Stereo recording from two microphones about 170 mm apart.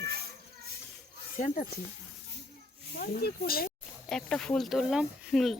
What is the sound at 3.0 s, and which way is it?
Speech, 60° left (ahead or behind).